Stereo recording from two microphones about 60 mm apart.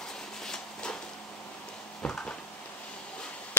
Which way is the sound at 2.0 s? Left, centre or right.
Centre.